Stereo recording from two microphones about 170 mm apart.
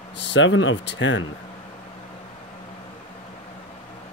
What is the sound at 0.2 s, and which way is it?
Speech, 90° left.